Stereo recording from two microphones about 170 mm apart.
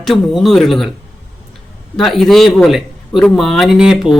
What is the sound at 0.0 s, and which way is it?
Speech, centre (ahead or behind).